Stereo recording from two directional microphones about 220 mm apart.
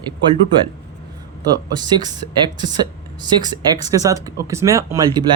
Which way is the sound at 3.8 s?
15° right (ahead or behind).